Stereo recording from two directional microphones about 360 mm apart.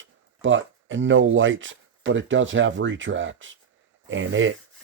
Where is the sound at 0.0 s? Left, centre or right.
Right.